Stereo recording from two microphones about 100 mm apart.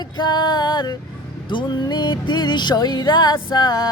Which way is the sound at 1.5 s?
50° left (ahead or behind).